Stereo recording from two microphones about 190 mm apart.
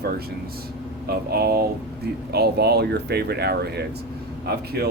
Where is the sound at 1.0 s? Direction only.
55° right (ahead or behind).